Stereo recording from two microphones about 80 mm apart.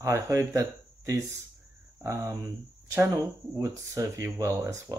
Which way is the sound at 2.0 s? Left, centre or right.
Right.